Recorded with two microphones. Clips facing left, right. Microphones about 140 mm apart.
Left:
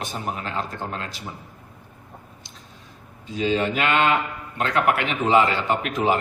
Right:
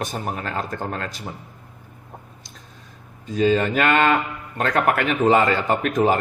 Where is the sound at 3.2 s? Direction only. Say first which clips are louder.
Right 4 dB; 45° right (ahead or behind).